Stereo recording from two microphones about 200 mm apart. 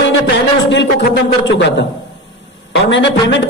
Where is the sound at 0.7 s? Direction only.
65° left (ahead or behind).